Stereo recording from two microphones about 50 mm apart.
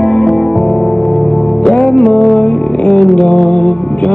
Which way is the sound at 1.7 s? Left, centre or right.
Centre.